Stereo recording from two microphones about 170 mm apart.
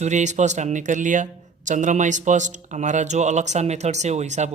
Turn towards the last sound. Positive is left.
turn(degrees=-40)  # may be behind; listen again after turning